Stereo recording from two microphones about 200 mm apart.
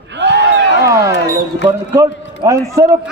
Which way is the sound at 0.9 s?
15° right (ahead or behind).